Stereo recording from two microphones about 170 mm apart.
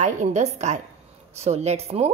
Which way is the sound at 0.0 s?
45° right (ahead or behind).